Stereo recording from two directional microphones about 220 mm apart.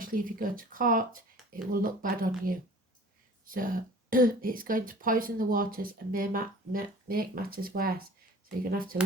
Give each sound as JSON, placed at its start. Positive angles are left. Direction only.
{"t": 0.0, "sound": "speech", "side_deg": -40}